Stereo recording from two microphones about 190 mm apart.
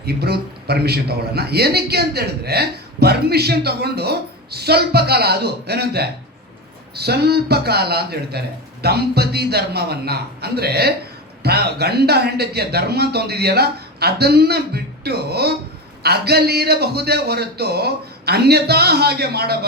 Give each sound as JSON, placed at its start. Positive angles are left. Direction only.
{"t": 0.0, "sound": "a man's voice", "side_deg": -55}